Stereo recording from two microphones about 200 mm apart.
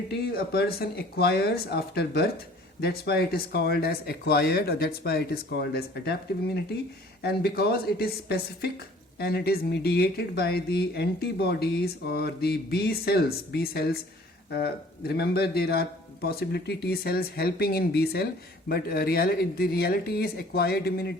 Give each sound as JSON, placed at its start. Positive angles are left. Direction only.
{"t": 0.3, "sound": "speech", "side_deg": 50}